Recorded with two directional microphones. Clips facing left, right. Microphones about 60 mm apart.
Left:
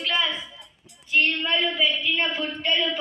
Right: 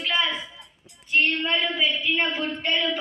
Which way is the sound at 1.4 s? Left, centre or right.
Centre.